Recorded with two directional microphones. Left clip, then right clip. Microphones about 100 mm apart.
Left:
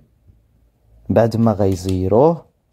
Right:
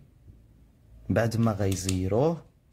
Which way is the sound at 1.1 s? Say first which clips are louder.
Left 11 dB; 35° left (ahead or behind).